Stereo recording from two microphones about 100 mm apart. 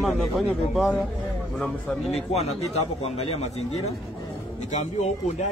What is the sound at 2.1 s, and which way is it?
Speech, 90° left.